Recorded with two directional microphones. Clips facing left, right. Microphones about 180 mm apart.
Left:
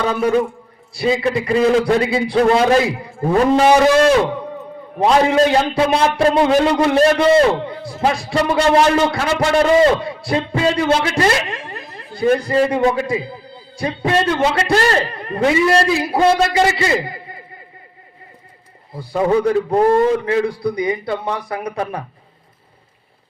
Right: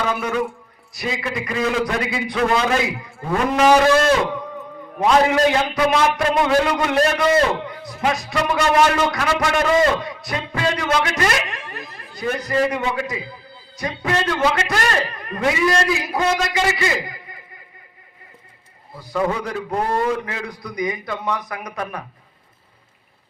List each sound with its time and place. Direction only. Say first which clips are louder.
0.2 s a man's voice: left 7 dB; 30° left (ahead or behind)
4.9 s a man's voice: left 3 dB; 30° left (ahead or behind)
19.7 s a man's voice: left 6 dB; 30° left (ahead or behind)